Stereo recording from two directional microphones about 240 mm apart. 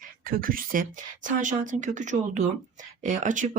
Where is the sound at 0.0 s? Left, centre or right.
Right.